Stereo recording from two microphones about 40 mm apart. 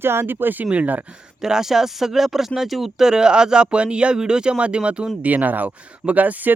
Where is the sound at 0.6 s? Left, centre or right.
Right.